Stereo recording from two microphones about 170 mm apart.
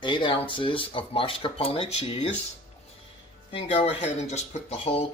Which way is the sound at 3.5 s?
35° left (ahead or behind).